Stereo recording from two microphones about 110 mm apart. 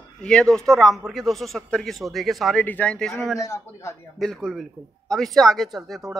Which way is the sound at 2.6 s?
15° left (ahead or behind).